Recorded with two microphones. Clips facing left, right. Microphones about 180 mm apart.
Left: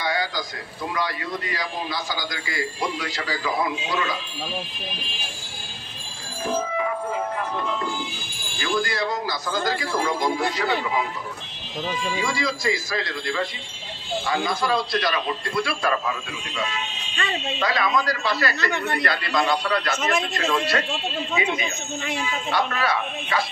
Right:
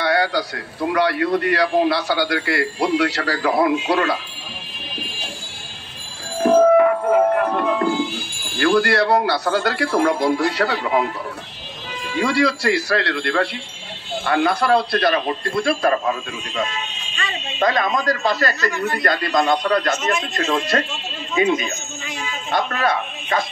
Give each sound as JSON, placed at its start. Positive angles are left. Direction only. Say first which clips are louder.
{"t": 0.0, "sound": "a man's voice", "louder": "right 7 dB", "side_deg": -70}
{"t": 6.4, "sound": "a man's voice", "louder": "right 13 dB", "side_deg": -60}
{"t": 12.2, "sound": "a man's voice", "louder": "right 7 dB", "side_deg": -65}